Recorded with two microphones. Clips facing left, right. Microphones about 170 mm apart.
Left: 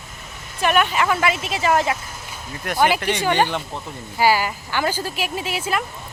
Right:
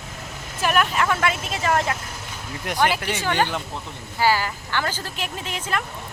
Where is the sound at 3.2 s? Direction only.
10° left (ahead or behind).